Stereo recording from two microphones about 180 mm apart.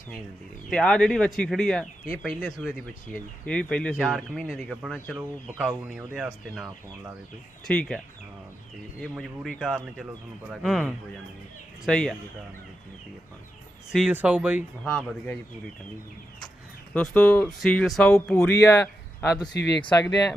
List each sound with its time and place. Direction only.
0.7 s speech: 5° left (ahead or behind)
13.9 s speech: 5° right (ahead or behind)
14.8 s speech: 5° left (ahead or behind)
16.9 s a man's voice: 5° left (ahead or behind)
19.5 s speech: 70° left (ahead or behind)